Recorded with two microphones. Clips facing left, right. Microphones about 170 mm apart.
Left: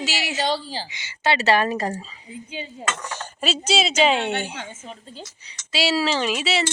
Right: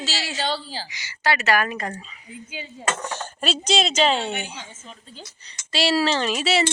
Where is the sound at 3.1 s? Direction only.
10° left (ahead or behind).